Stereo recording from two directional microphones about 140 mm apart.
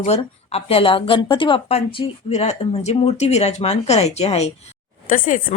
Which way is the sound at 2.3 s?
50° left (ahead or behind).